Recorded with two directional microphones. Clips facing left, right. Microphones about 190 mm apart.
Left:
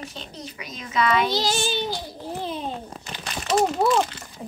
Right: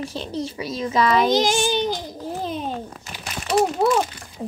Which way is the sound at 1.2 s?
15° right (ahead or behind).